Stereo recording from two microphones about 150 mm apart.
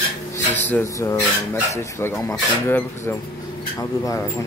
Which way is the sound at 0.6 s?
15° left (ahead or behind).